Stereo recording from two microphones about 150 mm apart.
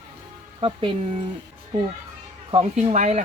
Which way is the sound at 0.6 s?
35° right (ahead or behind).